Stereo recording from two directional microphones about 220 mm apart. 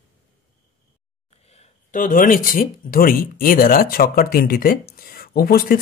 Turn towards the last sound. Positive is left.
turn(degrees=45)  # may be behind; listen again after turning